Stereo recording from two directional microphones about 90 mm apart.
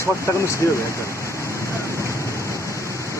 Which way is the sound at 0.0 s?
30° left (ahead or behind).